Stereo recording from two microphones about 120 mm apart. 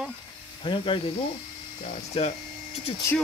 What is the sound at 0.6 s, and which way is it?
Speech, 45° left (ahead or behind).